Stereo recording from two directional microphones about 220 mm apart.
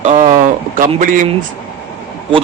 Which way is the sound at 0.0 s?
35° right (ahead or behind).